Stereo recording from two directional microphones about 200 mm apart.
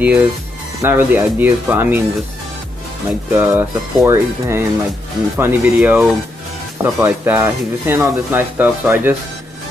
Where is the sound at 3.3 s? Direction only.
10° right (ahead or behind).